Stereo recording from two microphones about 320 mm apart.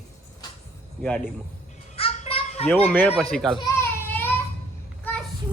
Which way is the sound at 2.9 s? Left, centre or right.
Centre.